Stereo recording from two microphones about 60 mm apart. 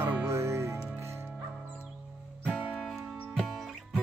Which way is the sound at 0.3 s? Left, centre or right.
Right.